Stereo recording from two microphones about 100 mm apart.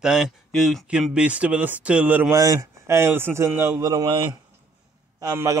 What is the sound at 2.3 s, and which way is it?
A man's voice, 35° right (ahead or behind).